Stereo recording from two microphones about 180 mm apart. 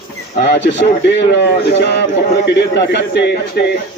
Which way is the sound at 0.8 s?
75° left (ahead or behind).